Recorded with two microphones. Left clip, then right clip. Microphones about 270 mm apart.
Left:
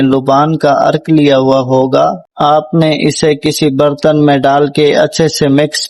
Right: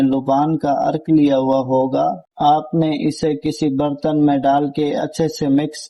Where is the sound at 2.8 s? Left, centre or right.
Left.